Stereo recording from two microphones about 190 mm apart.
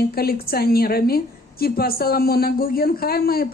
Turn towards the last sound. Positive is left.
turn(degrees=50)  # may be behind; listen again after turning